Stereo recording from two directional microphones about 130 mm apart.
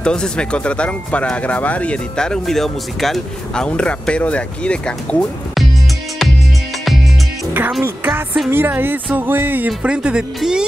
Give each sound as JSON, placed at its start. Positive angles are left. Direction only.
{"t": 0.0, "sound": "speech", "side_deg": 5}
{"t": 7.8, "sound": "speech", "side_deg": -15}